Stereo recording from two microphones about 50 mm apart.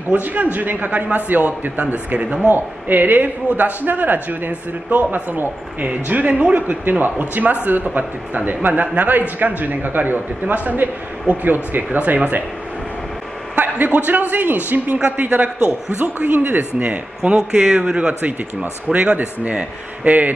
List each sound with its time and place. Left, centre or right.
0.1 s speech: right
13.6 s a man's voice: right
18.2 s a man's voice: right